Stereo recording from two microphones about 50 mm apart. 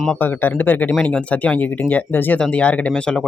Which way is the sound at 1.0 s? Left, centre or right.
Left.